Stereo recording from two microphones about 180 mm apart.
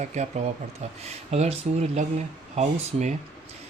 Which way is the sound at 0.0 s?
40° right (ahead or behind).